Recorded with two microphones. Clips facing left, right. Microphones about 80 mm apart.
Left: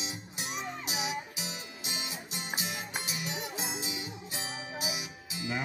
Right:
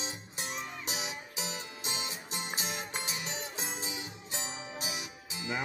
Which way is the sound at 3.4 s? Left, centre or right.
Centre.